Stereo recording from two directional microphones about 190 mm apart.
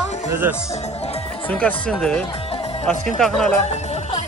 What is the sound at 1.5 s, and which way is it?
Speech, 5° left (ahead or behind).